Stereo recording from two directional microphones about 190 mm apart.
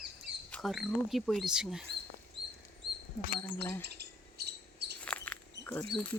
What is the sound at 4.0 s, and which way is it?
Bird, 60° right (ahead or behind).